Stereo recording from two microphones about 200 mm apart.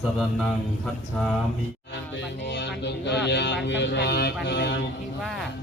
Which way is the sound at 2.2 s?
60° left (ahead or behind).